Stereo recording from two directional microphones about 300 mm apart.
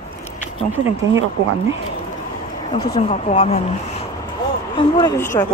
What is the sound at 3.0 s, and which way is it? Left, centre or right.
Speech, centre.